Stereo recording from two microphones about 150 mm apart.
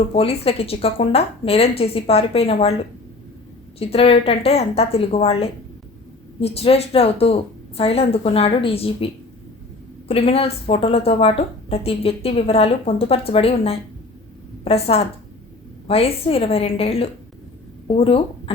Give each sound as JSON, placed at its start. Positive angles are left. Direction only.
{"t": 0.1, "sound": "a woman's voice", "side_deg": 40}
{"t": 3.8, "sound": "a woman's voice", "side_deg": 40}
{"t": 10.1, "sound": "a woman's voice", "side_deg": 40}